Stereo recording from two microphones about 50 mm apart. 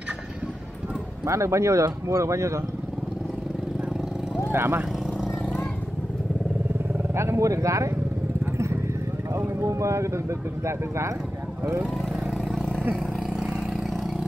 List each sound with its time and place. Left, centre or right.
1.2 s speech: right
4.5 s speech: right
7.2 s speech: right
9.4 s speech: right